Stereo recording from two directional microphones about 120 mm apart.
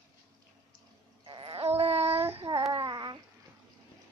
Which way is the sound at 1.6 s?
60° right (ahead or behind).